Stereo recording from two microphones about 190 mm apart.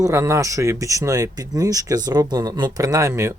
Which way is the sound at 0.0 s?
15° right (ahead or behind).